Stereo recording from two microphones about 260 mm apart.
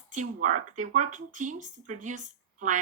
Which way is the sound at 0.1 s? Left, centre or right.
Right.